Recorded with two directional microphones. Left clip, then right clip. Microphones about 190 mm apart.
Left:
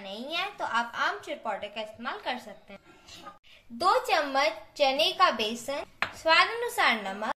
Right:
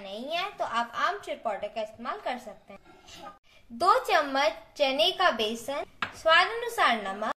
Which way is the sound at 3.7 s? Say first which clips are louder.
Right 2 dB; centre (ahead or behind).